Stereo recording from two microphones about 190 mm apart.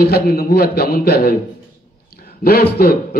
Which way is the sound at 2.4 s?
55° left (ahead or behind).